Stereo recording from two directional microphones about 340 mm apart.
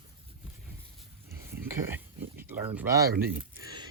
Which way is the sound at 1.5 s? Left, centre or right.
Centre.